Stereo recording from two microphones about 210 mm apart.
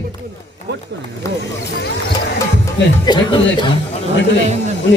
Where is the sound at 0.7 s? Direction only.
55° right (ahead or behind).